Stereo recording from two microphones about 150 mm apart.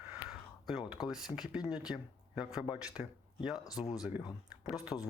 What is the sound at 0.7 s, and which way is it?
Speech, 5° right (ahead or behind).